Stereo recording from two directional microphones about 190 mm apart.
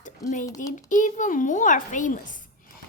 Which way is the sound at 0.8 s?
40° left (ahead or behind).